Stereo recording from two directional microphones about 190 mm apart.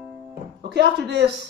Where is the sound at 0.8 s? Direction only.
70° right (ahead or behind).